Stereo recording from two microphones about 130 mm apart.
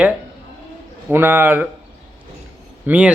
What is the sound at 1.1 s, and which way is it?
Speech, 15° right (ahead or behind).